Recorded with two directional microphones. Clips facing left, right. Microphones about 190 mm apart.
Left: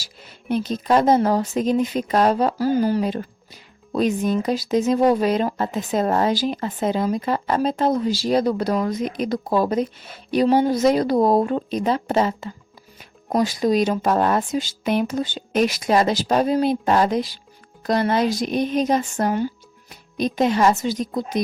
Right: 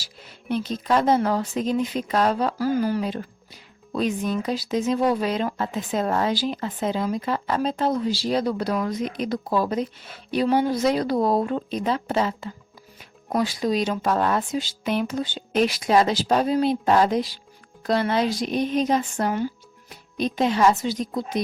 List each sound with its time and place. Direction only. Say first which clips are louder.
0.5 s speech: left 3 dB; 40° left (ahead or behind)
2.6 s speech: left 3 dB; 30° left (ahead or behind)
3.9 s speech: left 4 dB; 45° left (ahead or behind)